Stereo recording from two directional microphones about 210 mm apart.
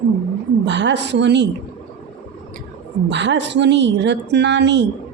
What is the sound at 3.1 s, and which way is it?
Speech, 55° right (ahead or behind).